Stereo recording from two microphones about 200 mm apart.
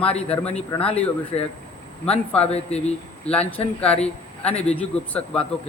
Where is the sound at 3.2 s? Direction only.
5° left (ahead or behind).